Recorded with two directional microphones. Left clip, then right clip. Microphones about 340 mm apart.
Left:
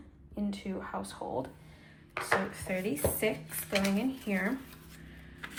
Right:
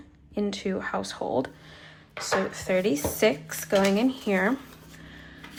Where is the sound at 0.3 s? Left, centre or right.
Right.